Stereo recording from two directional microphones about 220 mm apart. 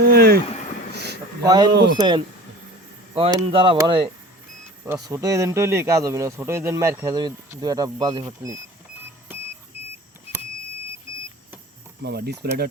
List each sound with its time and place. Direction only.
0.0 s vehicle: 45° right (ahead or behind)
0.9 s a sound: 50° right (ahead or behind)
1.5 s speech: 20° right (ahead or behind)
1.7 s speech: 50° right (ahead or behind)
2.0 s speech: 20° right (ahead or behind)
12.0 s speech: 45° right (ahead or behind)